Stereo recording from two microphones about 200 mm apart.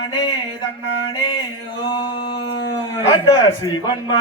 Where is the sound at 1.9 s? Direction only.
20° left (ahead or behind).